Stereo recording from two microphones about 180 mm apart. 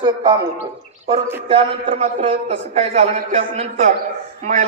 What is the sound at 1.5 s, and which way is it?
A man's voice, 35° right (ahead or behind).